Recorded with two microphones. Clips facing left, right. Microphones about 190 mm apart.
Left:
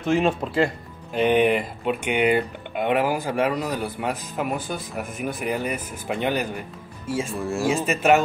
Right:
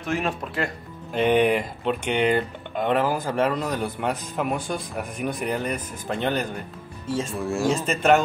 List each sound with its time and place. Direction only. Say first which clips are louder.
0.0 s speech: left 6 dB; 25° left (ahead or behind)
1.1 s speech: left 1 dB; centre (ahead or behind)